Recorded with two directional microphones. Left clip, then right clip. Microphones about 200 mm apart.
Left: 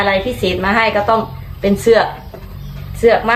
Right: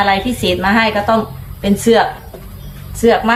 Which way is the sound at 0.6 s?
15° left (ahead or behind).